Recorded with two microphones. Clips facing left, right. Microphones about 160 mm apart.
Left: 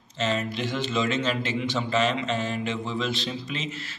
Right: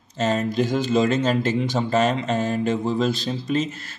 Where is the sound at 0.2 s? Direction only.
45° right (ahead or behind).